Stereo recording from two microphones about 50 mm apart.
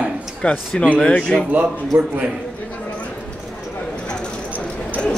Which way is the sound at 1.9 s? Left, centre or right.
Right.